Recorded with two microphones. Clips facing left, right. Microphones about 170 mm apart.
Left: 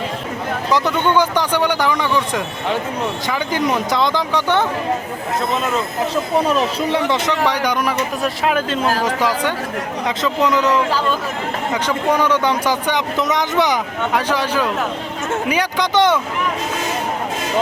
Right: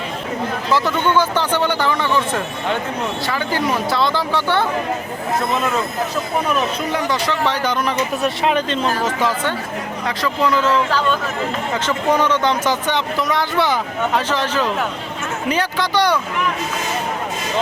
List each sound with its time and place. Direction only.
0.7 s speech: 15° left (ahead or behind)
6.6 s speech: 30° left (ahead or behind)
7.4 s speech: 10° left (ahead or behind)